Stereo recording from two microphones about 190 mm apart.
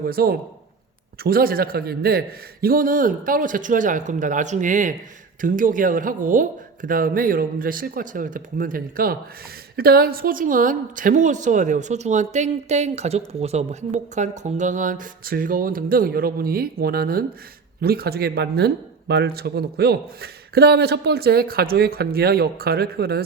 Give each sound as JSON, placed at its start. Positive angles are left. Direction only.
{"t": 0.0, "sound": "a woman's voice", "side_deg": -50}